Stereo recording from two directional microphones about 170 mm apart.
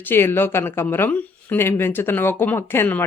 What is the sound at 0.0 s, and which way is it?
Speech, 15° left (ahead or behind).